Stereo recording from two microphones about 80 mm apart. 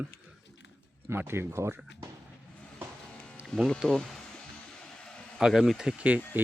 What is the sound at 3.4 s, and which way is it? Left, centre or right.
Music, centre.